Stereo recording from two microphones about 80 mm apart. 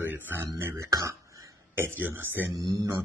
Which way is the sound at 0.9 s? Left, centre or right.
Right.